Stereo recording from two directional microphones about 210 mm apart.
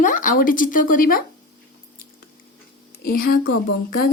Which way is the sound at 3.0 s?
45° left (ahead or behind).